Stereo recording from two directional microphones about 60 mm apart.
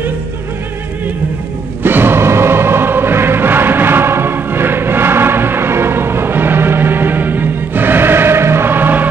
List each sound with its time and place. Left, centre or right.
1.8 s music: right